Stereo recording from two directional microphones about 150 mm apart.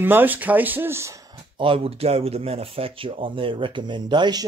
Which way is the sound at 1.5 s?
35° right (ahead or behind).